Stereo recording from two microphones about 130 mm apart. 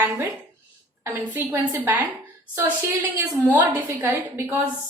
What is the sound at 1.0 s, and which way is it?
A woman's voice, 15° right (ahead or behind).